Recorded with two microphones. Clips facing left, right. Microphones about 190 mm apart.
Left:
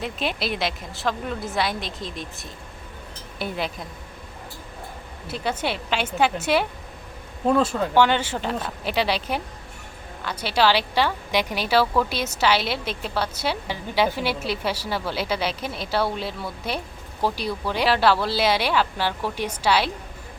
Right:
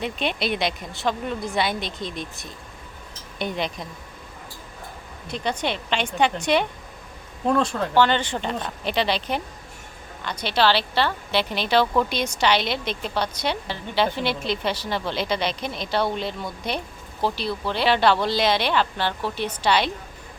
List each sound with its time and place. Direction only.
0.0 s a woman's voice: centre (ahead or behind)
5.3 s a woman's voice: 5° left (ahead or behind)